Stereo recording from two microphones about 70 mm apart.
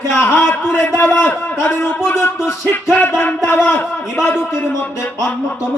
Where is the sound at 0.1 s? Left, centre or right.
Left.